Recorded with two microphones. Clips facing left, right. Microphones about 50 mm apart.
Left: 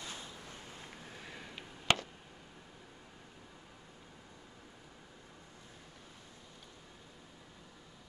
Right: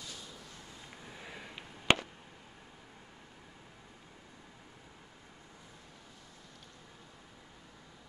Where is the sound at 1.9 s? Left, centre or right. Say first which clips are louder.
Right 3 dB; right.